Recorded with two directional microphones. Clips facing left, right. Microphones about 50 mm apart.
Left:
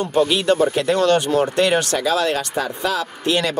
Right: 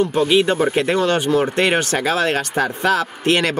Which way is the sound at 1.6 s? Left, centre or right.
Right.